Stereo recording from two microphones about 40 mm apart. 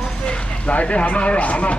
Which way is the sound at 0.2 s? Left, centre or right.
Left.